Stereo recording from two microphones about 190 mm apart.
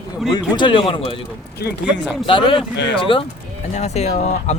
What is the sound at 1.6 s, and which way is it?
Speech, 60° left (ahead or behind).